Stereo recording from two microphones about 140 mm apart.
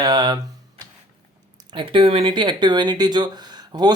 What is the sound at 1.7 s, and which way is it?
Speech, 40° right (ahead or behind).